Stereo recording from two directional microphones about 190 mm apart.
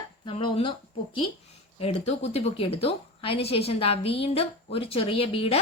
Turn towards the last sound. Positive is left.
turn(degrees=30)  # may be behind; listen again after turning